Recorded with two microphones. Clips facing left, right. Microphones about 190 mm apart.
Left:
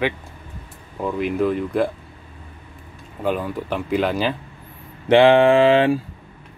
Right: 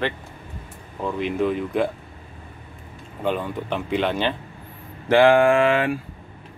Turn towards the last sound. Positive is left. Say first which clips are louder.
# left 4 dB
turn(degrees=25)  # may be behind; listen again after turning